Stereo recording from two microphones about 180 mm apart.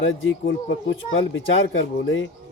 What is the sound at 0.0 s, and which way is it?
Speech, 90° left.